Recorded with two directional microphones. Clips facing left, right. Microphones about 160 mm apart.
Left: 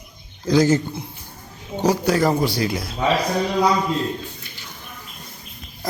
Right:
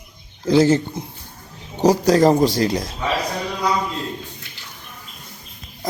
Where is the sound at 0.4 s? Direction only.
25° right (ahead or behind).